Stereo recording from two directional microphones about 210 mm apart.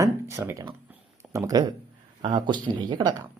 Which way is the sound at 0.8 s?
15° right (ahead or behind).